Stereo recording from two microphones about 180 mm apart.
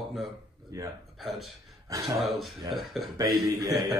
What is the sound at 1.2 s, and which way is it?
Speech, centre (ahead or behind).